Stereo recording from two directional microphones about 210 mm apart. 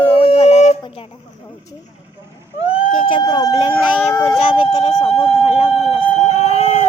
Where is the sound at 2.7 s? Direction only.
25° left (ahead or behind).